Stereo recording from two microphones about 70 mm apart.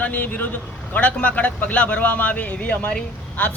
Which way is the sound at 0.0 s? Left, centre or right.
Left.